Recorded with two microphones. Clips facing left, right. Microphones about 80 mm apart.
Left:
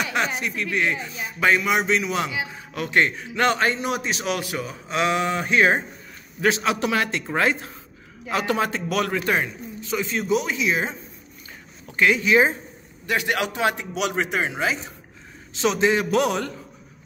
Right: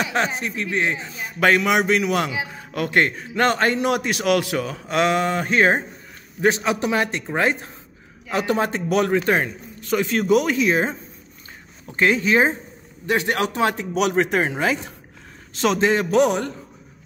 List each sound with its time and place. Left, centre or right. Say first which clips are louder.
0.1 s a man's voice: right 2 dB; right
1.4 s a man's voice: right 3 dB; right
3.7 s a man's voice: right 5 dB; right
4.9 s speech: right 3 dB; right
6.4 s a man's voice: right 2 dB; right
9.8 s a man's voice: right 5 dB; right
16.2 s a man's voice: right 4 dB; right